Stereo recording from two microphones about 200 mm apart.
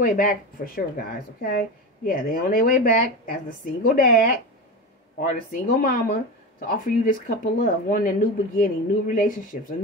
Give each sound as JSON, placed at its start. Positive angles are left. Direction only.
{"t": 0.0, "sound": "speech", "side_deg": 45}
{"t": 5.3, "sound": "speech", "side_deg": 45}